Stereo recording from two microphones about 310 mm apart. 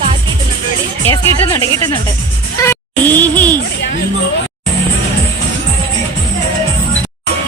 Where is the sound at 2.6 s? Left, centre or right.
Centre.